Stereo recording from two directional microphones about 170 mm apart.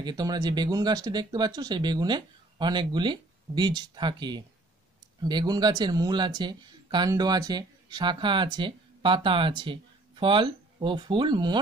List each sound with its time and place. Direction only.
0.0 s speech: 25° right (ahead or behind)